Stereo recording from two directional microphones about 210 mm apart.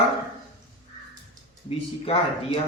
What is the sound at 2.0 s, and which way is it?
Speech, 30° left (ahead or behind).